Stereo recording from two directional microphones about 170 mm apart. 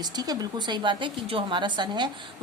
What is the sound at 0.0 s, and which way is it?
A woman's voice, 25° right (ahead or behind).